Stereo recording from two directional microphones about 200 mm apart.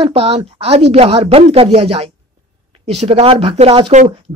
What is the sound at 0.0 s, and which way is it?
Speech, 30° right (ahead or behind).